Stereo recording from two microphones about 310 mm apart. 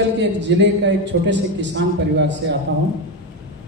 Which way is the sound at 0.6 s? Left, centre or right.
Right.